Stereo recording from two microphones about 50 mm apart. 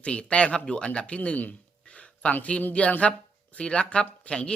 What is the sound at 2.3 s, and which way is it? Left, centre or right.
Speech, left.